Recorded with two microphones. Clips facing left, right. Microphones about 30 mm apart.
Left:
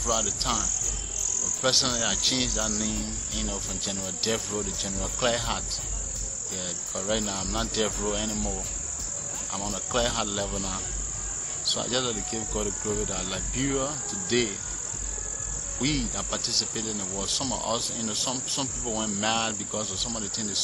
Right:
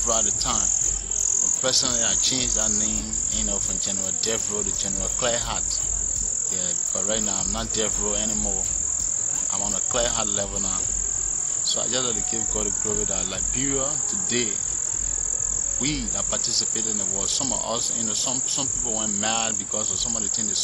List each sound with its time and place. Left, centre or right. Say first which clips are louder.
0.1 s cricket: right 1 dB; centre
1.6 s speech: left 1 dB; centre
2.0 s speech: right 2 dB; centre
2.2 s speech: even; centre
2.6 s cricket: right 2 dB; centre
2.9 s speech: right 3 dB; centre
6.9 s speech: even; centre
9.6 s speech: right 1 dB; centre
11.7 s speech: even; centre
15.8 s speech: left 1 dB; centre